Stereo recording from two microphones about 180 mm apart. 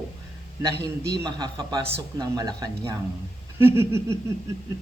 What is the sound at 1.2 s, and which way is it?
Speech, 25° right (ahead or behind).